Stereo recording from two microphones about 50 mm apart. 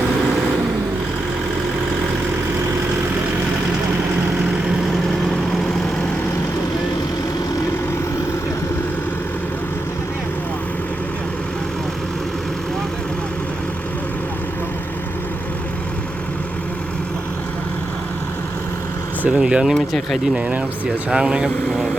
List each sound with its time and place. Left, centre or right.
19.3 s speech: centre
19.7 s speech: centre
20.8 s speech: centre